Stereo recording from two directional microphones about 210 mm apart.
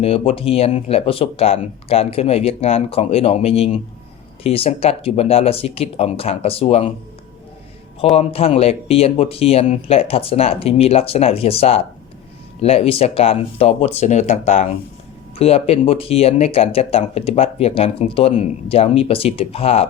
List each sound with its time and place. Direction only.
0.0 s speech: 30° left (ahead or behind)
8.1 s speech: 30° left (ahead or behind)